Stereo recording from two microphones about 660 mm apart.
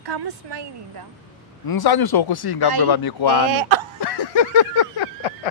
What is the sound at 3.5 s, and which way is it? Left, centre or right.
Speech, right.